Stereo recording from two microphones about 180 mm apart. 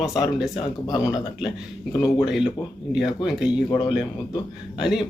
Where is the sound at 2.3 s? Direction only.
5° right (ahead or behind).